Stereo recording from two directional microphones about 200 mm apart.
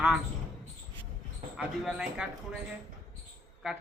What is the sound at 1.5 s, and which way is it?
Speech, 5° right (ahead or behind).